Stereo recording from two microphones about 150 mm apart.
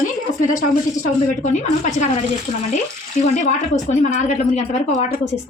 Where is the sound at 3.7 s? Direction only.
55° left (ahead or behind).